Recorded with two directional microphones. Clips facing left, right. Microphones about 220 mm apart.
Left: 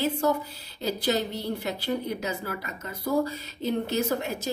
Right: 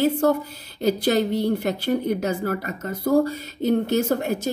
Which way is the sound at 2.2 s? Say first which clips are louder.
Right 8 dB; 50° right (ahead or behind).